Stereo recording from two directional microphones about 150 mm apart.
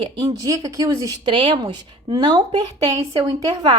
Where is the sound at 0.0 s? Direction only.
35° right (ahead or behind).